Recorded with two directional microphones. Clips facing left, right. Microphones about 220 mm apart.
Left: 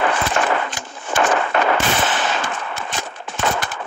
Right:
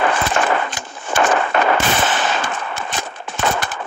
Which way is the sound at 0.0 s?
45° right (ahead or behind).